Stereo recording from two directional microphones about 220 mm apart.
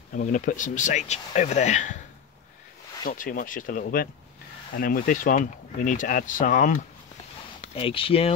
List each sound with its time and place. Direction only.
0.1 s speech: 35° left (ahead or behind)
3.1 s speech: 40° left (ahead or behind)
7.7 s speech: 25° left (ahead or behind)